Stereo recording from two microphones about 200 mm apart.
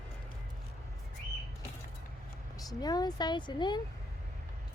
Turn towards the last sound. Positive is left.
turn(degrees=20)  # may be behind; listen again after turning